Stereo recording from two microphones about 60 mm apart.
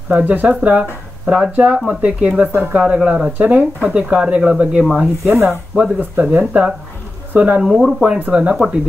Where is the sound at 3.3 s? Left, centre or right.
Right.